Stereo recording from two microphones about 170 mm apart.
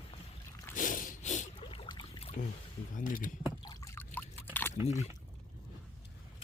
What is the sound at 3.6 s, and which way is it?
Trickle, 20° left (ahead or behind).